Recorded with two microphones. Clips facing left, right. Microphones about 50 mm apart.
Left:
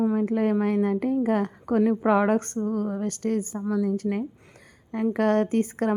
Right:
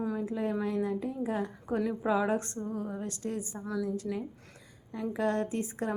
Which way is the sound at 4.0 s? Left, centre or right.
Left.